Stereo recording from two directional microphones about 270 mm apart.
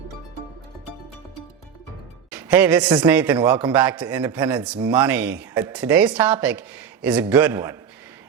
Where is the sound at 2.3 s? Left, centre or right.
Centre.